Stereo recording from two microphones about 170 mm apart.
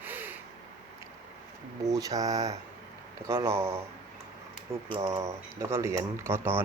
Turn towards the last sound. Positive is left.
turn(degrees=-15)  # may be behind; listen again after turning